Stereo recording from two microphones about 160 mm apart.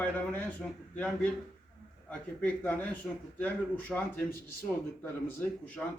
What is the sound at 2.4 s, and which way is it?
A man's voice, 10° left (ahead or behind).